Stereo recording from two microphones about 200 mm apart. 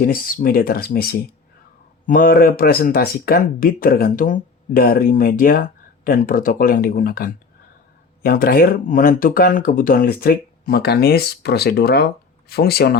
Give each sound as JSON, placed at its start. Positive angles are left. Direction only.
{"t": 0.0, "sound": "speech", "side_deg": 45}